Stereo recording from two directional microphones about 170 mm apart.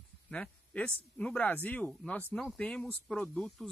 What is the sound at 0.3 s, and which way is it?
Speech, 5° left (ahead or behind).